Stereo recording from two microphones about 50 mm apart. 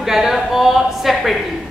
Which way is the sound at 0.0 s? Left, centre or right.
Centre.